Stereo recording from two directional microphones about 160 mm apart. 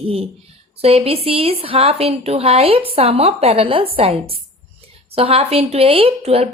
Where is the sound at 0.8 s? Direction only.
35° right (ahead or behind).